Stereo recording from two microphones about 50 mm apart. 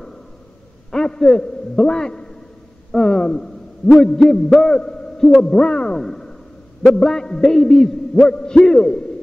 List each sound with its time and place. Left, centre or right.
0.9 s a man's voice: centre
5.9 s a sound: centre
7.0 s a man's voice: centre